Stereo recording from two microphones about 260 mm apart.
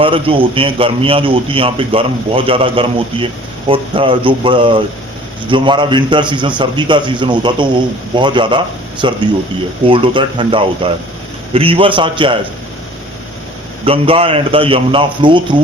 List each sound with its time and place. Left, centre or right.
0.0 s a man's voice: centre
13.8 s a man's voice: right